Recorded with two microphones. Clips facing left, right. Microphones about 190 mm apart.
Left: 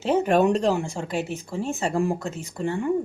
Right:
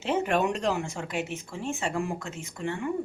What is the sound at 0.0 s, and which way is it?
Speech, 40° left (ahead or behind).